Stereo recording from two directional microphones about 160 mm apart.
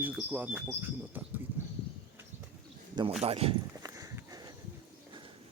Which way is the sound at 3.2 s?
35° right (ahead or behind).